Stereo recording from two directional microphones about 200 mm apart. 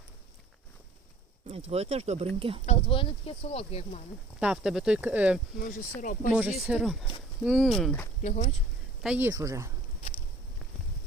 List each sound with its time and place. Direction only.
1.5 s speech: 30° right (ahead or behind)
2.6 s speech: 30° left (ahead or behind)
4.4 s speech: 5° right (ahead or behind)
5.5 s speech: 45° left (ahead or behind)
6.3 s speech: 5° right (ahead or behind)
8.2 s speech: 35° left (ahead or behind)
9.0 s speech: 10° right (ahead or behind)